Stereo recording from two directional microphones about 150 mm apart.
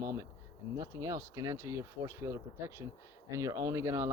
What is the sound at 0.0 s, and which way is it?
Speech, 20° right (ahead or behind).